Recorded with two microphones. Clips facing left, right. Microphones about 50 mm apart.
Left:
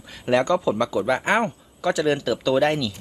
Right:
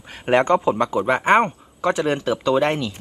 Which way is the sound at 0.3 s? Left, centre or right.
Right.